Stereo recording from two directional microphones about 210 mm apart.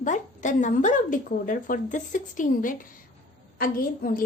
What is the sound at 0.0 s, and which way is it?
A woman's voice, 35° left (ahead or behind).